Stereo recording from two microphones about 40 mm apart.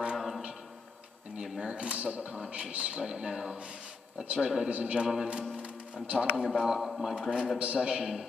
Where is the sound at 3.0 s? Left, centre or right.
Centre.